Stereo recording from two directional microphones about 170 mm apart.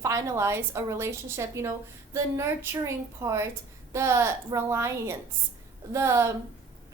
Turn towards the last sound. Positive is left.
turn(degrees=-15)  # may be behind; listen again after turning